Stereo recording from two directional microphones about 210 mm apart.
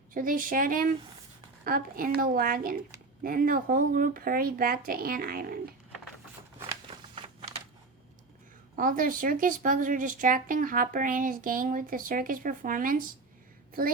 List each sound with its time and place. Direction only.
0.1 s speech: 40° right (ahead or behind)
6.8 s a sound: 25° right (ahead or behind)
8.7 s speech: 40° right (ahead or behind)